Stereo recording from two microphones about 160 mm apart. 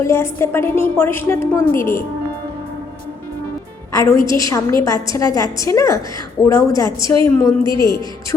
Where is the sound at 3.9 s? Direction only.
20° left (ahead or behind).